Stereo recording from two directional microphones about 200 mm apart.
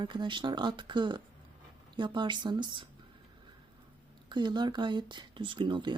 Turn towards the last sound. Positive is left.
turn(degrees=-25)  # may be behind; listen again after turning